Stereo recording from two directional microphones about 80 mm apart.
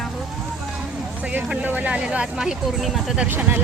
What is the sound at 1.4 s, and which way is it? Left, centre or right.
Speech, centre.